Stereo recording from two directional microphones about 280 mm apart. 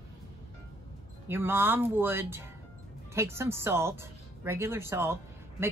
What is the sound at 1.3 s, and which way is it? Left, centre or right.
Speech, centre.